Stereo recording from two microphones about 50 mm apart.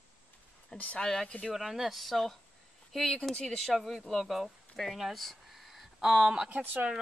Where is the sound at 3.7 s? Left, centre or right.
Centre.